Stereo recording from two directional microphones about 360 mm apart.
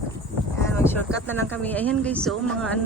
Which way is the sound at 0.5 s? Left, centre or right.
Centre.